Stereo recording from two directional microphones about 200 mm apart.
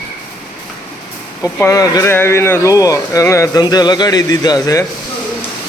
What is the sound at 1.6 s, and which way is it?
Speech, 15° left (ahead or behind).